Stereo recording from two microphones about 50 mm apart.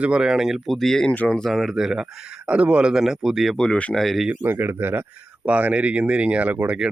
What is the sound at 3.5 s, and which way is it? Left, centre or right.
Speech, centre.